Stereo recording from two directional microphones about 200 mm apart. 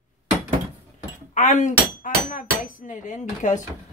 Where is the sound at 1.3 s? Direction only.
40° left (ahead or behind).